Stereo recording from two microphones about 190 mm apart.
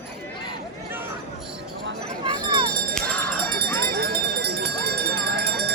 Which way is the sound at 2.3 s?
25° right (ahead or behind).